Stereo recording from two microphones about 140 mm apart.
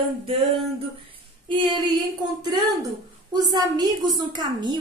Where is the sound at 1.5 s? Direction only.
35° right (ahead or behind).